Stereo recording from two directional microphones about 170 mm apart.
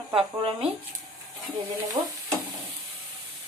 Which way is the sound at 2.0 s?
25° right (ahead or behind).